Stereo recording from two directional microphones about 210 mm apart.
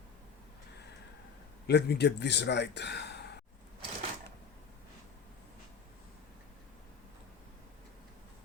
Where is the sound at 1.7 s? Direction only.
55° left (ahead or behind).